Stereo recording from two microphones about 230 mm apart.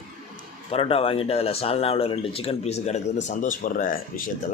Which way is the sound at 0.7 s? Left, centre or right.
Left.